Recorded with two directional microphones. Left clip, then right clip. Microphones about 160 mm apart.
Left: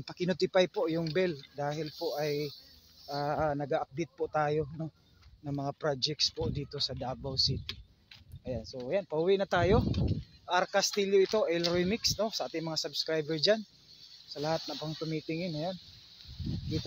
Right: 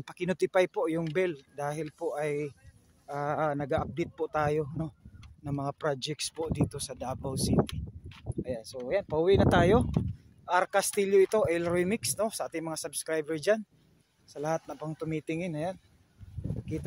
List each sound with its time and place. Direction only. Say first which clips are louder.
0.0 s speech: right 1 dB; 25° right (ahead or behind)
8.5 s speech: right 1 dB; 40° right (ahead or behind); by 14.6 s 20° right (ahead or behind)
14.7 s speech: right 1 dB; 35° right (ahead or behind)